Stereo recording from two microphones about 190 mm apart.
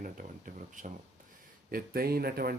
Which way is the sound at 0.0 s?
45° right (ahead or behind).